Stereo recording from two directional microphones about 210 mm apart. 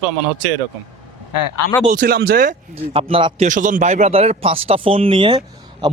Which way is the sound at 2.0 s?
45° right (ahead or behind).